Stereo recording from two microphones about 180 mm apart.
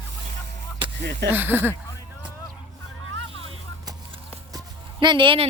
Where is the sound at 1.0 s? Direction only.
65° right (ahead or behind).